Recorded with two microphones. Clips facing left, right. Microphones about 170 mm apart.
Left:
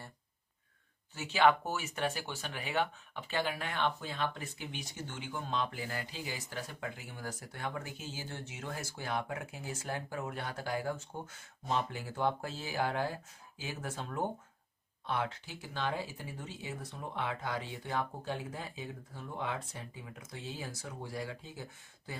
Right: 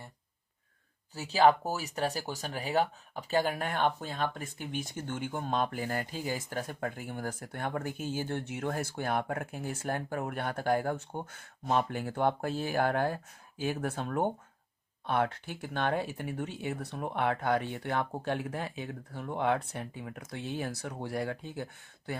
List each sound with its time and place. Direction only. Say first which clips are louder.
1.1 s speech: right 3 dB; 35° right (ahead or behind); by 22.2 s 65° right (ahead or behind)